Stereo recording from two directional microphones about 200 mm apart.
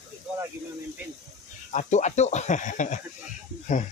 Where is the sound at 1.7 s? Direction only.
35° left (ahead or behind).